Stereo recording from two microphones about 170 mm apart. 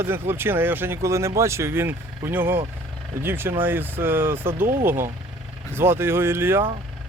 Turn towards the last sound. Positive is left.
turn(degrees=-15)  # may be behind; listen again after turning